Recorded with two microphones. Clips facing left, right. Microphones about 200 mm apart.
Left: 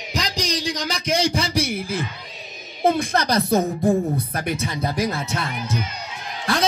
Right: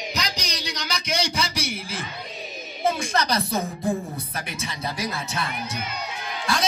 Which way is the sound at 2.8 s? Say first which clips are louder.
Left 4 dB; 60° left (ahead or behind).